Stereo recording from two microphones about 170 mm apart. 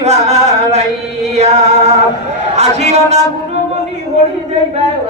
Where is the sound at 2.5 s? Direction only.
40° right (ahead or behind).